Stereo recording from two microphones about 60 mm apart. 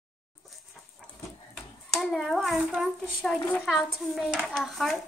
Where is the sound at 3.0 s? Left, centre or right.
Centre.